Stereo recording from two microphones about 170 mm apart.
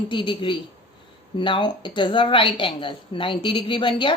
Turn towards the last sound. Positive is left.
turn(degrees=30)  # may be behind; listen again after turning